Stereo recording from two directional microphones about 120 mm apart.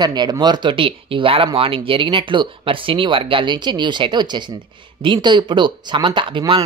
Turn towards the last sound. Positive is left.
turn(degrees=-45)  # may be behind; listen again after turning